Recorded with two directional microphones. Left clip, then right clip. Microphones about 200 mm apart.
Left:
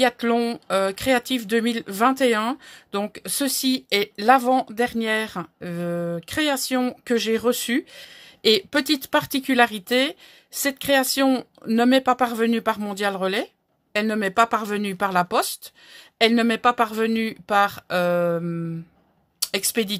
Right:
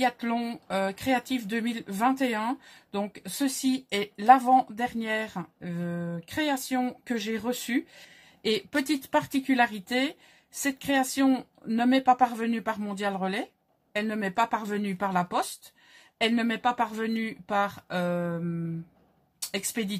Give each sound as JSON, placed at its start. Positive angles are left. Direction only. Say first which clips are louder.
{"t": 0.0, "sound": "speech", "louder": "left 7 dB", "side_deg": 50}
{"t": 19.5, "sound": "speech", "louder": "left 8 dB", "side_deg": 45}